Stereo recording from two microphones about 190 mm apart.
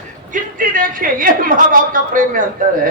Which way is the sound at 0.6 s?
45° right (ahead or behind).